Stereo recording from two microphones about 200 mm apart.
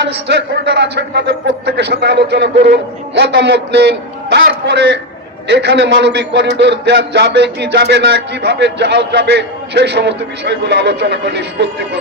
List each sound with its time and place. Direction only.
0.0 s a man's voice: 60° right (ahead or behind)